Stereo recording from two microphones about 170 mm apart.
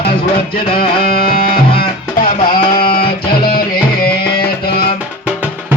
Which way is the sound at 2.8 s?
60° left (ahead or behind).